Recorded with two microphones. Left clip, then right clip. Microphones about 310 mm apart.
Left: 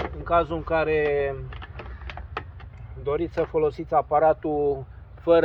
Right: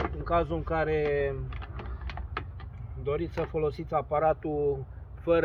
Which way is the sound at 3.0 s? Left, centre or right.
Centre.